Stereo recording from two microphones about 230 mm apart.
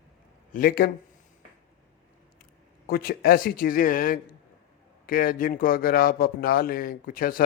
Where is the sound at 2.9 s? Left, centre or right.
Left.